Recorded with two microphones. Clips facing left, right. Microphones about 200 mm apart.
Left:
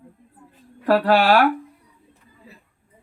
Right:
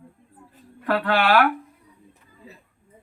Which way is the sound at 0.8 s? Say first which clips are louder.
Left 5 dB; 35° left (ahead or behind).